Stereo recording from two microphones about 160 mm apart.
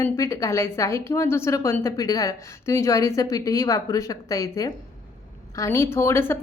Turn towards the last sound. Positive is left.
turn(degrees=15)  # may be behind; listen again after turning